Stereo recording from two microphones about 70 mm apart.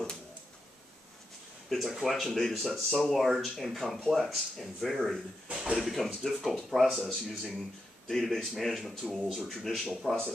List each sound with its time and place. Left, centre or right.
1.7 s speech: centre
5.5 s a sound: centre
5.8 s speech: centre